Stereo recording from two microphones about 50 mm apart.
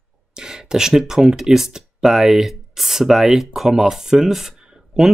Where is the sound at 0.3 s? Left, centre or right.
Centre.